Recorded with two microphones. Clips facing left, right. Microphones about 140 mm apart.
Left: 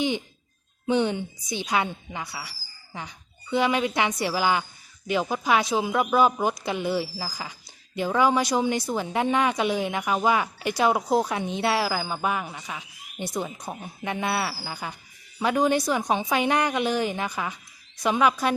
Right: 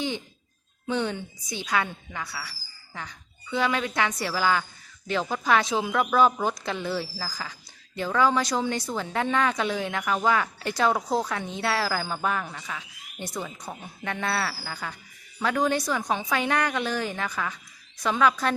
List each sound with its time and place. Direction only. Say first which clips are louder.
0.9 s speech: left 5 dB; 20° left (ahead or behind)